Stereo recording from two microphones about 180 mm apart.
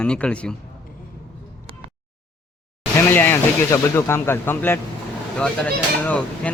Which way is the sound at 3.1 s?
10° left (ahead or behind).